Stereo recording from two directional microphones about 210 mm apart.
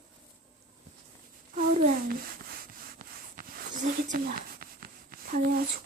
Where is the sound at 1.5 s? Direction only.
40° right (ahead or behind).